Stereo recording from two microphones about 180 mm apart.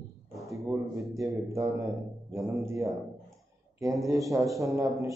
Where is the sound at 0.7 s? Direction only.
15° right (ahead or behind).